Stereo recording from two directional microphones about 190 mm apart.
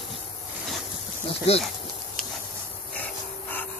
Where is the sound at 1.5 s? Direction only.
30° left (ahead or behind).